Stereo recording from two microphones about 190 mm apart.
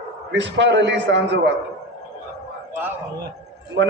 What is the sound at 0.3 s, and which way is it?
A man's voice, 70° right (ahead or behind).